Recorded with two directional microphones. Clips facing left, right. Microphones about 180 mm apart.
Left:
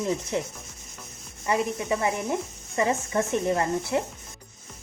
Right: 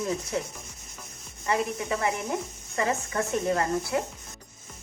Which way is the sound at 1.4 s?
20° left (ahead or behind).